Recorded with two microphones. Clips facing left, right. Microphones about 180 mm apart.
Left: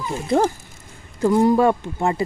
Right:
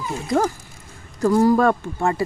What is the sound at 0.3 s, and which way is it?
Speech, 30° left (ahead or behind).